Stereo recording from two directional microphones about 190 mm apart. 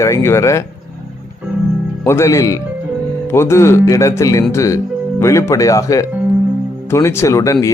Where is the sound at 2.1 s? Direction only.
15° left (ahead or behind).